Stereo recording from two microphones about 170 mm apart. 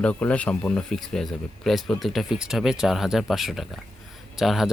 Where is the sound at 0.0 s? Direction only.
5° left (ahead or behind).